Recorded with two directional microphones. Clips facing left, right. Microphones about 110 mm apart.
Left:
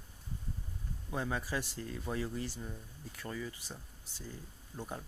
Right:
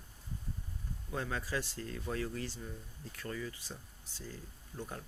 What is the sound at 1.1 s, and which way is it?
Speech, 15° left (ahead or behind).